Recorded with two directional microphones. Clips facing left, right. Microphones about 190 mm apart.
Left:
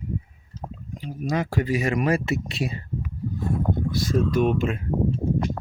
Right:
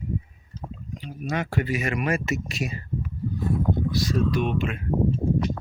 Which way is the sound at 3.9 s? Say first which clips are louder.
Left 2 dB; 50° left (ahead or behind).